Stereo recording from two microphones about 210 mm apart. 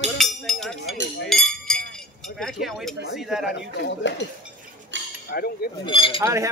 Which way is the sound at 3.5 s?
60° left (ahead or behind).